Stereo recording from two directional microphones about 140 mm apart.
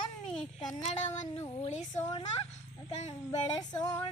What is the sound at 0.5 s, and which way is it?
A woman's voice, 50° left (ahead or behind).